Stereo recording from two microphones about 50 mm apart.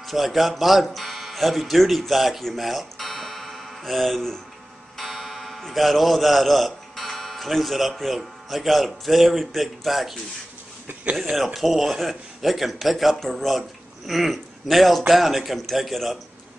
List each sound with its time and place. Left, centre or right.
0.0 s a man's voice: centre
11.3 s a man's voice: centre